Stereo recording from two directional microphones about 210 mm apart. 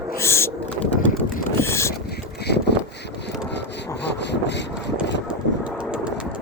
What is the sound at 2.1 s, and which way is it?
Boat, 50° left (ahead or behind).